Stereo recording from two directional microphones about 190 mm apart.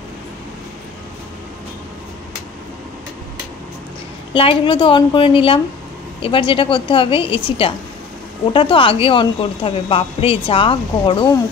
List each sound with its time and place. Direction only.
4.3 s a woman's voice: 30° left (ahead or behind)